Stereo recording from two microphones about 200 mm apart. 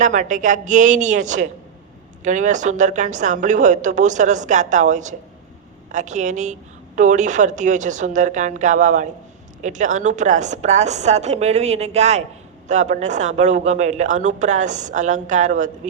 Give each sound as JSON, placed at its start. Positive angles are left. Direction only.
{"t": 0.0, "sound": "speech", "side_deg": -40}